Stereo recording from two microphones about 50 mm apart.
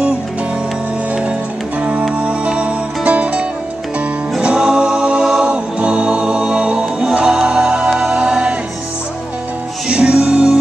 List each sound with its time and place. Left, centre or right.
1.8 s music: right
4.4 s singing: centre
5.4 s music: right
8.1 s a capella: centre
9.8 s music: right